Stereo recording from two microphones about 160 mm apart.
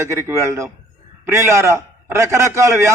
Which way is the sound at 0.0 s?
15° right (ahead or behind).